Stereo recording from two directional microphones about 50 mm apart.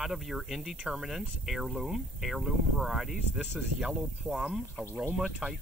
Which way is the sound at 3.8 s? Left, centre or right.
Centre.